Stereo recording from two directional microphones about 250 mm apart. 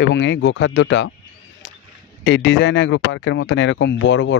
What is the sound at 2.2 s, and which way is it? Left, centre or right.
Speech, left.